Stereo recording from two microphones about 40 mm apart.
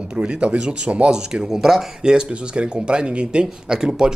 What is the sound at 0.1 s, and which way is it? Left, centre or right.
Speech, right.